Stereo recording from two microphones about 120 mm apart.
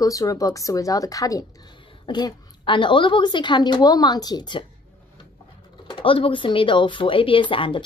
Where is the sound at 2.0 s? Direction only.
40° left (ahead or behind).